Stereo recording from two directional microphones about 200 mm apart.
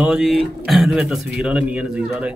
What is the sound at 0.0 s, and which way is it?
A man's voice, 5° right (ahead or behind).